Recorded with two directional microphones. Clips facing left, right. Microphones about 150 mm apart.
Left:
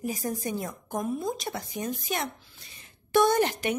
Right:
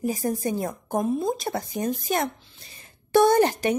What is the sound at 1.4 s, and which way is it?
Speech, 40° right (ahead or behind).